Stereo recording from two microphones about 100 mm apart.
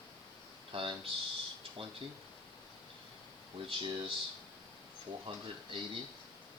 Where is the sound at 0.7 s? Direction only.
60° right (ahead or behind).